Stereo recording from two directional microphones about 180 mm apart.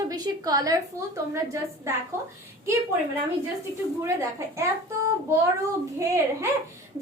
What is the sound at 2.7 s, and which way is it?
Speech, 15° right (ahead or behind).